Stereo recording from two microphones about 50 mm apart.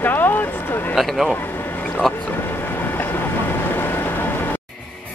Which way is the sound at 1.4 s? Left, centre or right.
Left.